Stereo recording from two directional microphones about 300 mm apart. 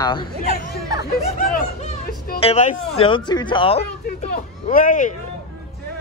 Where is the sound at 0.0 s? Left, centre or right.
Centre.